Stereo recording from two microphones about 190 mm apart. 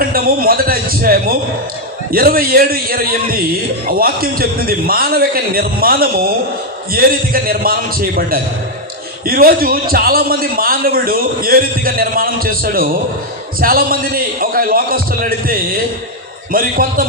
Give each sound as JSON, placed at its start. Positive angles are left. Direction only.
{"t": 0.1, "sound": "a man's voice", "side_deg": -50}